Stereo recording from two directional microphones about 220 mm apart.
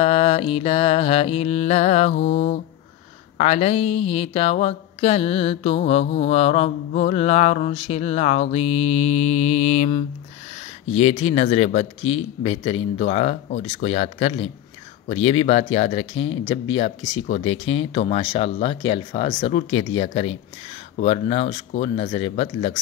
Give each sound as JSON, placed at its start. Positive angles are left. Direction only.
{"t": 0.0, "sound": "speech", "side_deg": 25}